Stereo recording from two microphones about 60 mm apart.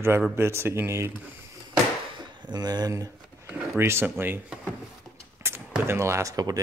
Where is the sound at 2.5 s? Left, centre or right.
Right.